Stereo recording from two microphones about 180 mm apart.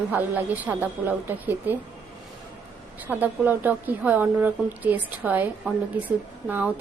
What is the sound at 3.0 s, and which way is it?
A woman's voice, 10° right (ahead or behind).